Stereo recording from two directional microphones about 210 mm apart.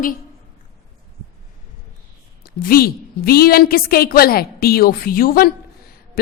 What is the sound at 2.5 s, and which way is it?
A woman's voice, 45° left (ahead or behind).